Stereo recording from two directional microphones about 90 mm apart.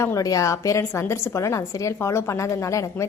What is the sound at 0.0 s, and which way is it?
A woman's voice, 35° left (ahead or behind).